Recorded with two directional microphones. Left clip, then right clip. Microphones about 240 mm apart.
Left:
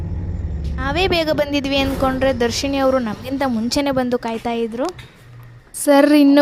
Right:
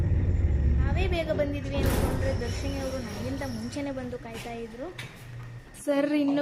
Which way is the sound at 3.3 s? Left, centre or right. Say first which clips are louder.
Left 15 dB; left.